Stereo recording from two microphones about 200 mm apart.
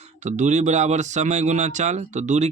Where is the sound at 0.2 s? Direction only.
35° right (ahead or behind).